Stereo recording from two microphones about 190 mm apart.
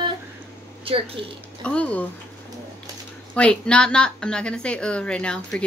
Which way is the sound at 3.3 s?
5° left (ahead or behind).